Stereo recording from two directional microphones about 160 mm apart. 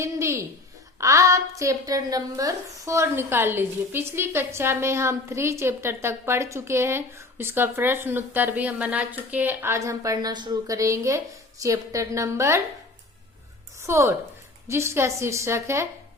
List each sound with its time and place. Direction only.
0.0 s a woman's voice: 15° right (ahead or behind)
13.8 s a woman's voice: 15° right (ahead or behind)